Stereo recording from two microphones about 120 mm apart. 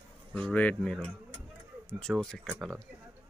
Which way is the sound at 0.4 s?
10° left (ahead or behind).